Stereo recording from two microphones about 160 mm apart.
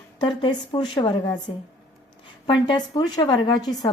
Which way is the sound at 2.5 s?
30° left (ahead or behind).